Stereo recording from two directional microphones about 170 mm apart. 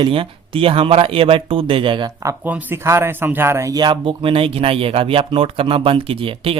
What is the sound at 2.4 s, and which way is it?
Speech, 10° right (ahead or behind).